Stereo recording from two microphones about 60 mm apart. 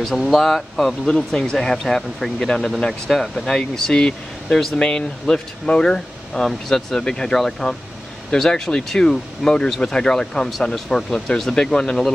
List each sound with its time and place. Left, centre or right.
0.0 s speech: centre
1.0 s speech: centre